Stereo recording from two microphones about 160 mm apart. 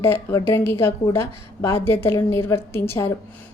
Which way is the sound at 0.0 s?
15° left (ahead or behind).